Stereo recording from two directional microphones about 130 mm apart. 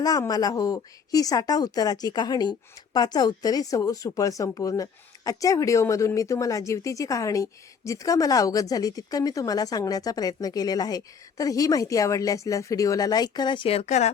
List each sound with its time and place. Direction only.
0.0 s a woman's voice: 30° left (ahead or behind); by 14.1 s 60° left (ahead or behind)